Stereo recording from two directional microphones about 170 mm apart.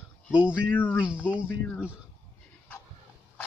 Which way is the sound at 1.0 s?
5° right (ahead or behind).